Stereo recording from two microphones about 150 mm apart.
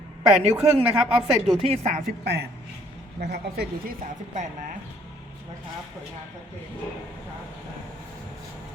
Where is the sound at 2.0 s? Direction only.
90° right.